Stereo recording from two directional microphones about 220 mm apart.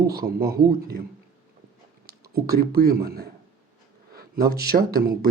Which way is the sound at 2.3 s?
45° right (ahead or behind).